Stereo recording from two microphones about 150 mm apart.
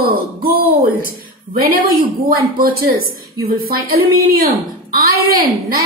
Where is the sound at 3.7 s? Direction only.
80° right.